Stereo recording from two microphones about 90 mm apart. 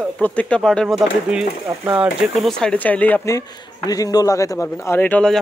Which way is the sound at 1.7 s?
30° right (ahead or behind).